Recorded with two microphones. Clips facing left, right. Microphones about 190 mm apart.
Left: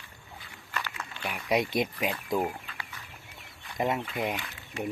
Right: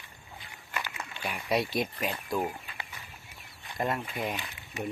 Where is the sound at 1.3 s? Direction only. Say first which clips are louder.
Left 2 dB; 15° left (ahead or behind).